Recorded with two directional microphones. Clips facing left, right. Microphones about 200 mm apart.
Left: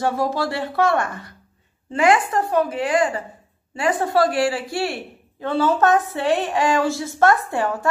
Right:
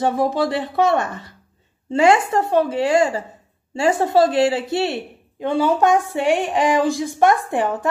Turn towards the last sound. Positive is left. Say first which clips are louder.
# right 2 dB
turn(degrees=-15)  # may be behind; listen again after turning